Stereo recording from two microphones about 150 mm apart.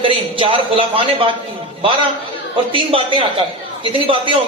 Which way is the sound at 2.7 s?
35° right (ahead or behind).